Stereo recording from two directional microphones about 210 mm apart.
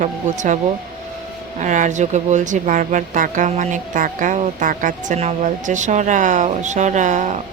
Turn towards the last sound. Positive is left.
turn(degrees=-35)  # may be behind; listen again after turning